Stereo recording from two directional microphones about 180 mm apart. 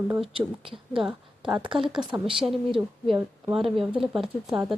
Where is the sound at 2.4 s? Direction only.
Centre (ahead or behind).